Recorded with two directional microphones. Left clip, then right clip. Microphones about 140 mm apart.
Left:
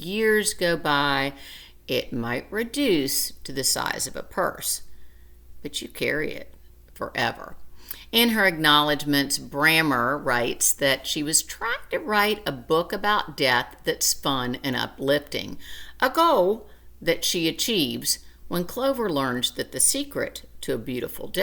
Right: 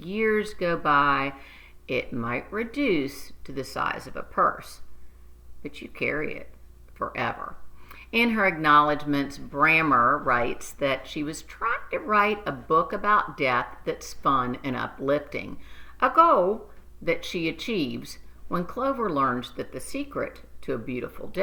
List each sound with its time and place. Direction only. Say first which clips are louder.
0.0 s speech: left 3 dB; 30° left (ahead or behind)
5.6 s speech: left 2 dB; 30° left (ahead or behind)